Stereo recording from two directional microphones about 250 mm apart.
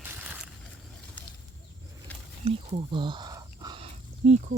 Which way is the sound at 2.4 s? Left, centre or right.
Right.